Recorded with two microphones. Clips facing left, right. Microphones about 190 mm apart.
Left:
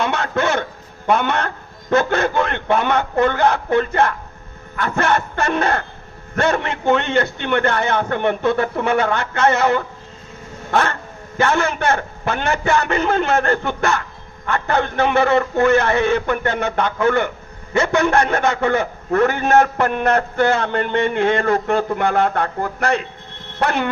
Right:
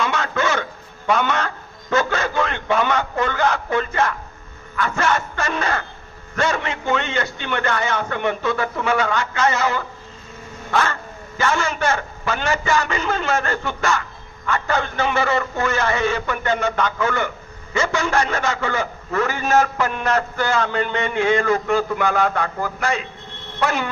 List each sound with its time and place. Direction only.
0.0 s a sound: 60° left (ahead or behind)
1.0 s a man's voice: 55° left (ahead or behind)
10.7 s cat: 60° left (ahead or behind)
11.3 s a man's voice: 60° left (ahead or behind)